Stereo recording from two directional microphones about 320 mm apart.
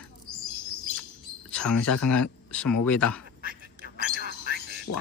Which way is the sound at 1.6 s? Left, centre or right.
Left.